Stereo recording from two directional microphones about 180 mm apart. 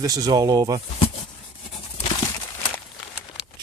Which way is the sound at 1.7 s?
30° left (ahead or behind).